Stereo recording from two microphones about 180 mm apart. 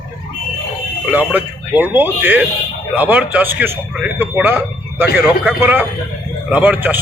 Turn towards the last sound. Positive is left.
turn(degrees=-10)  # may be behind; listen again after turning